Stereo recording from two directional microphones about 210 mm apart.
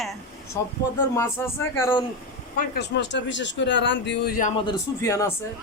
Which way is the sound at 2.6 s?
55° left (ahead or behind).